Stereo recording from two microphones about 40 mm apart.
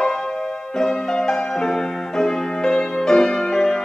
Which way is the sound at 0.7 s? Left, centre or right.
Centre.